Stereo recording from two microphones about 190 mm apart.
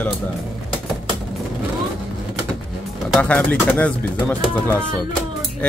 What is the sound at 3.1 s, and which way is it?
Speech, 5° left (ahead or behind).